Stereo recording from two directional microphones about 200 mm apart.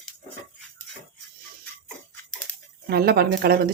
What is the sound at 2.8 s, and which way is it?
Speech, 50° right (ahead or behind).